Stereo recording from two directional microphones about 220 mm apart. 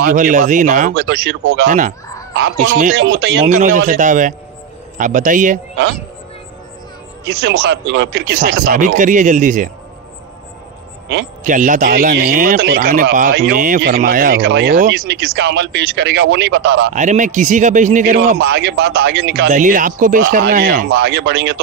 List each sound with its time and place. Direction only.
0.0 s speech: 40° right (ahead or behind)
0.9 s speech: 50° right (ahead or behind)
1.6 s speech: 35° right (ahead or behind)
2.8 s speech: 50° right (ahead or behind)
3.6 s speech: 35° right (ahead or behind)
7.2 s speech: 45° right (ahead or behind)
8.4 s speech: 40° right (ahead or behind)
11.4 s speech: 35° right (ahead or behind); by 16.9 s 50° right (ahead or behind)
16.9 s speech: 35° right (ahead or behind); by 19.5 s 50° right (ahead or behind)
19.5 s speech: 35° right (ahead or behind); by 21.5 s 50° right (ahead or behind)